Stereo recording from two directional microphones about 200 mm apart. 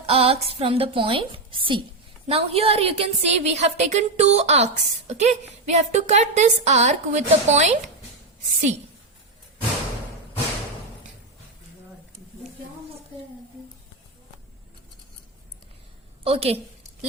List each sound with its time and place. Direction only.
0.0 s a woman's voice: 30° right (ahead or behind)
16.2 s a woman's voice: 30° right (ahead or behind)